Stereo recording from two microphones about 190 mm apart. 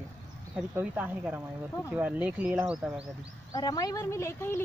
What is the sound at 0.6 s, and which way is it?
Speech, 10° right (ahead or behind).